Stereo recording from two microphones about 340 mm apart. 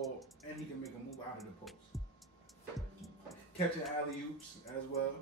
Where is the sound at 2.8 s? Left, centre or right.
Centre.